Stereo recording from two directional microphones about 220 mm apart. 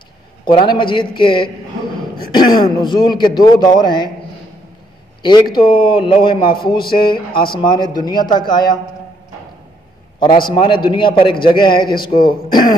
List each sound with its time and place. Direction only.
0.5 s a man's voice: 20° left (ahead or behind)
5.2 s a man's voice: 20° left (ahead or behind)
10.5 s a man's voice: 20° left (ahead or behind)